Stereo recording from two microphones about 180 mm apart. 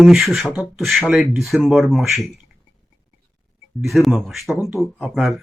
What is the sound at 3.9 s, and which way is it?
Speech, centre (ahead or behind).